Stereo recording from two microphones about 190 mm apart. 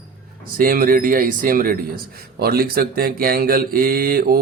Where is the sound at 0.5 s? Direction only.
50° right (ahead or behind).